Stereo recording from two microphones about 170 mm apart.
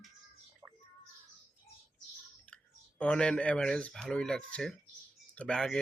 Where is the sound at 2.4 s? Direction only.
5° left (ahead or behind).